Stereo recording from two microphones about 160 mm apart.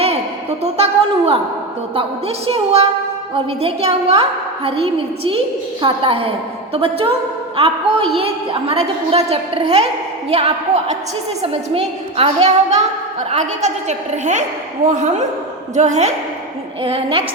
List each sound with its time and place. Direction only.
0.6 s a woman's voice: 40° right (ahead or behind)